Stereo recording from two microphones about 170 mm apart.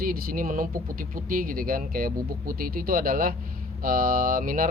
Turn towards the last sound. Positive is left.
turn(degrees=-55)  # may be behind; listen again after turning